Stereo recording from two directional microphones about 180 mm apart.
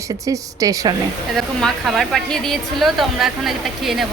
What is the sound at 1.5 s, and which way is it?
A woman's voice, centre (ahead or behind).